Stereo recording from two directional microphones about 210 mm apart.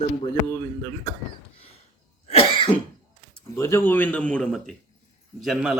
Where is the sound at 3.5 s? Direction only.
10° left (ahead or behind).